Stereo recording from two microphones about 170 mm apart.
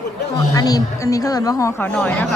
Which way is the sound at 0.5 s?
20° left (ahead or behind).